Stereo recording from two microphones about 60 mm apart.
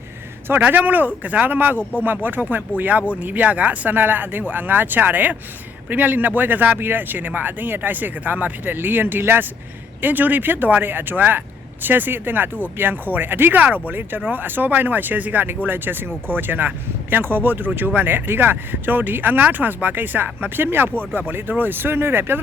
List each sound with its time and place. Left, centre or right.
0.4 s speech: right
1.8 s speech: left
2.0 s speech: right